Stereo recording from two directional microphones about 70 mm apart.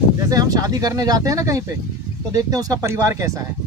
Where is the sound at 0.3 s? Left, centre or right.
Right.